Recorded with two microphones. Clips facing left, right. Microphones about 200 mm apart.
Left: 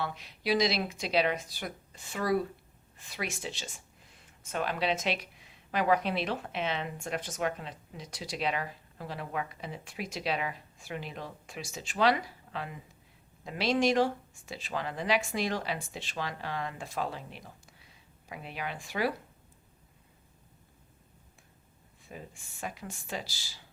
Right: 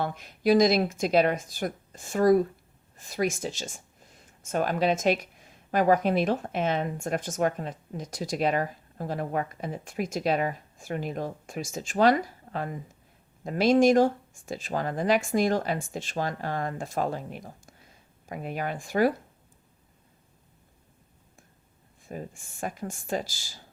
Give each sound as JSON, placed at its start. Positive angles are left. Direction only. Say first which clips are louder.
{"t": 0.0, "sound": "speech", "louder": "right 8 dB", "side_deg": -50}
{"t": 22.0, "sound": "speech", "louder": "right 8 dB", "side_deg": -45}